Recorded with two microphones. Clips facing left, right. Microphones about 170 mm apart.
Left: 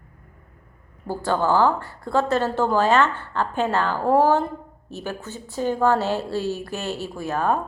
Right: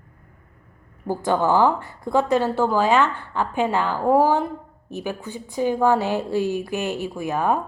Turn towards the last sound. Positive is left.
turn(degrees=-15)  # may be behind; listen again after turning